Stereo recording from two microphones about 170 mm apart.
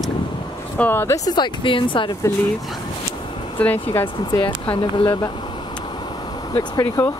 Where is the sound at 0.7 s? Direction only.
10° left (ahead or behind); by 2.1 s 30° left (ahead or behind).